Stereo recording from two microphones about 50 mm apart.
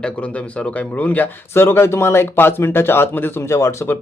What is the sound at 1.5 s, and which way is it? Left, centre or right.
Speech, left.